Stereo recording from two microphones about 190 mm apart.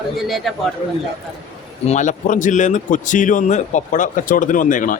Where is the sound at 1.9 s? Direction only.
40° left (ahead or behind).